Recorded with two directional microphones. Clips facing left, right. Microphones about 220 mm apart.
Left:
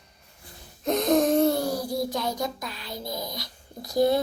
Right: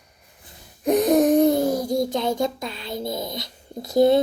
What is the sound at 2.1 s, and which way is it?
A child's voice, 25° right (ahead or behind).